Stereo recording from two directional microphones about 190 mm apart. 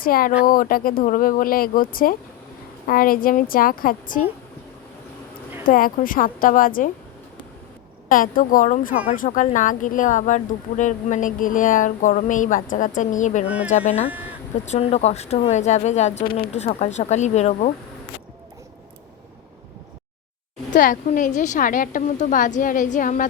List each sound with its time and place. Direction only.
0.0 s speech: 50° left (ahead or behind)
5.6 s speech: 45° left (ahead or behind)
8.1 s speech: 45° left (ahead or behind)
16.5 s speech: 35° left (ahead or behind)
20.7 s a sound: 45° left (ahead or behind)
21.2 s speech: 40° left (ahead or behind)